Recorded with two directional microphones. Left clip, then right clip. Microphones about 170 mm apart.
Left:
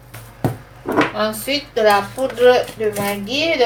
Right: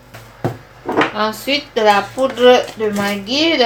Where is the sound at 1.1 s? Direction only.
40° right (ahead or behind).